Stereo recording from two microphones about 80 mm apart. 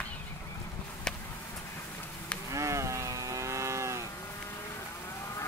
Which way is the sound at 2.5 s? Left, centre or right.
Right.